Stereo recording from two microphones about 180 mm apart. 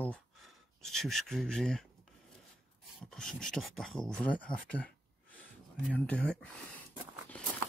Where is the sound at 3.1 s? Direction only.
5° left (ahead or behind).